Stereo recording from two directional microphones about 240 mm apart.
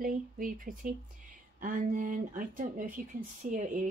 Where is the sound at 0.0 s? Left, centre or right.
Right.